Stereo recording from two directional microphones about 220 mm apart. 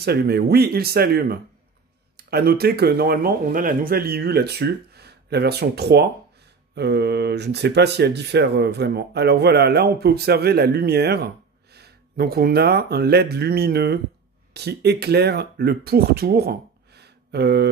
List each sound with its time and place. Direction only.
0.0 s speech: 45° right (ahead or behind)